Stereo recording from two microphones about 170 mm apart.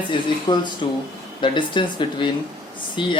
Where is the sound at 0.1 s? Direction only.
25° left (ahead or behind).